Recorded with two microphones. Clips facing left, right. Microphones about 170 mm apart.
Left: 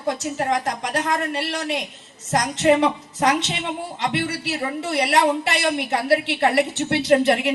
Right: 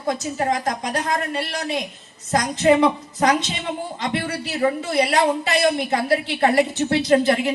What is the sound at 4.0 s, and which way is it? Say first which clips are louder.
A woman's voice: left 2 dB; 70° left (ahead or behind).